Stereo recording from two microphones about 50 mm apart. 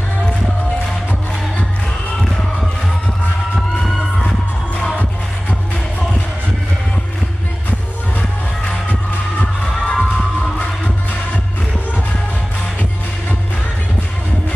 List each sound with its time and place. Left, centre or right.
9.4 s crowd: left